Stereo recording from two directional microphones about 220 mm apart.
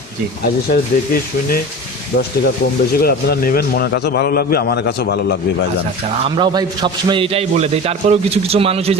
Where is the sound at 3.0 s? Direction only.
45° left (ahead or behind).